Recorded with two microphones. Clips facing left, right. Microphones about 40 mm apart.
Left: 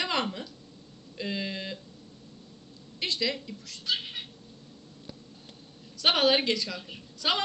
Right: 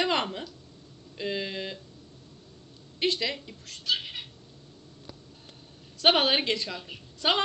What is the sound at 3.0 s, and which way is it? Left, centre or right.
Speech, right.